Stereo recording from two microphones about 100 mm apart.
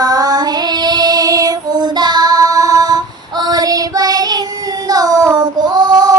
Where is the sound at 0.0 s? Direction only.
40° right (ahead or behind).